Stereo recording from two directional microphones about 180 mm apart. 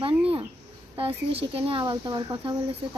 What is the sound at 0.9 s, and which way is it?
Speech, 30° right (ahead or behind).